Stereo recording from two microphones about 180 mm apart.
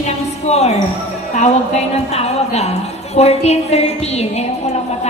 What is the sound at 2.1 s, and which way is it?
A woman's voice, 35° left (ahead or behind).